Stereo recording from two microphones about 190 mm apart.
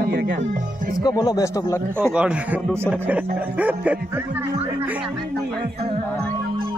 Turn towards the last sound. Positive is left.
turn(degrees=-10)  # may be behind; listen again after turning